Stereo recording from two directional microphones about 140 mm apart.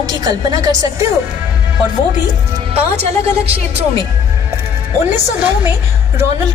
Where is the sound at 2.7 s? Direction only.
45° right (ahead or behind).